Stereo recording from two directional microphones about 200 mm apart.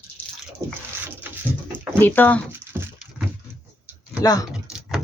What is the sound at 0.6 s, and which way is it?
Speech, 15° right (ahead or behind).